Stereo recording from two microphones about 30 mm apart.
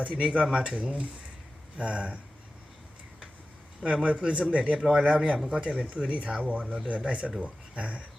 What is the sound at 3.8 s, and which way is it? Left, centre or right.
Speech, right.